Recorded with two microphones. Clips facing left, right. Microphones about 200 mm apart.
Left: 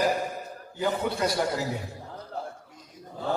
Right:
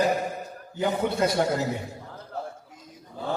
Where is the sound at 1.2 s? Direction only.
25° right (ahead or behind).